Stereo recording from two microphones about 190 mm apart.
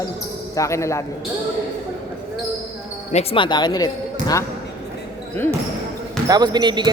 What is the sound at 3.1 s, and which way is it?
Speech, 30° left (ahead or behind).